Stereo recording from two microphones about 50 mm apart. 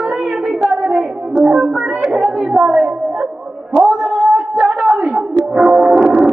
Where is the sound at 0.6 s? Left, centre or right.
Centre.